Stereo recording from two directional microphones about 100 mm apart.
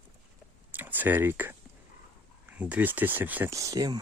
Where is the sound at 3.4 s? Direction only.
35° right (ahead or behind).